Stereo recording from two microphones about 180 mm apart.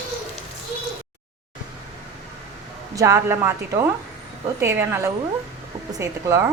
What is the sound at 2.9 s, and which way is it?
Speech, 15° right (ahead or behind).